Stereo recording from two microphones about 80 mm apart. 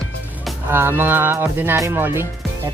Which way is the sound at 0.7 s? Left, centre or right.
Right.